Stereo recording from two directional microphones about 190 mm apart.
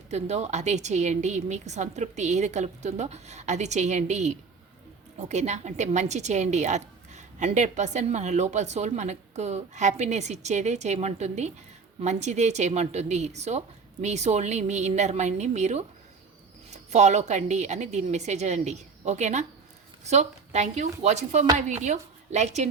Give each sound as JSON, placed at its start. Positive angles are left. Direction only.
{"t": 0.1, "sound": "a woman's voice", "side_deg": -35}